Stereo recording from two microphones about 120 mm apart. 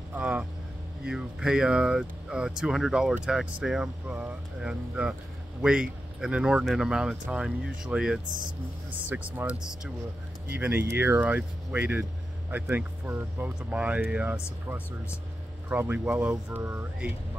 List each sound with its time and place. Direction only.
0.1 s speech: 10° right (ahead or behind)
9.4 s speech: 10° right (ahead or behind)